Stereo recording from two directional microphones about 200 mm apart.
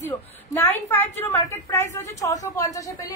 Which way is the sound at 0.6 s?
10° left (ahead or behind).